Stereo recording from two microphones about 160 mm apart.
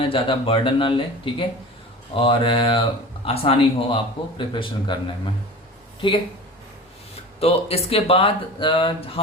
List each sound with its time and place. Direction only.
0.0 s speech: 35° left (ahead or behind)
7.3 s speech: 40° left (ahead or behind)